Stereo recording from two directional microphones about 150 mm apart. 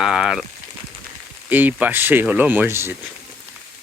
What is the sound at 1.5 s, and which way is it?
Speech, 10° right (ahead or behind).